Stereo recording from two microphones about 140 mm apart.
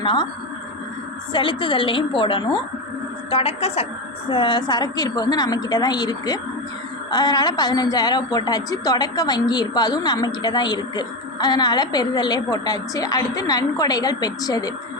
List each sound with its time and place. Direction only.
0.0 s a woman's voice: 35° left (ahead or behind)
1.3 s a woman's voice: 35° left (ahead or behind)